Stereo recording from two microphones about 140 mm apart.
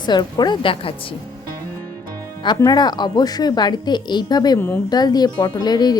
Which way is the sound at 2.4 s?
30° left (ahead or behind).